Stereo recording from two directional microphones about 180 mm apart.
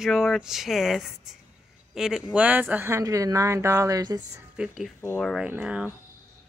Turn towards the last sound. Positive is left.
turn(degrees=-5)  # may be behind; listen again after turning